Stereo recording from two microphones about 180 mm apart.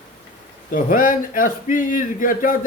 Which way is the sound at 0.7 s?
50° left (ahead or behind).